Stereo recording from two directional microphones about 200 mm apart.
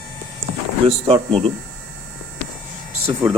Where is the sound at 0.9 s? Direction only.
30° right (ahead or behind).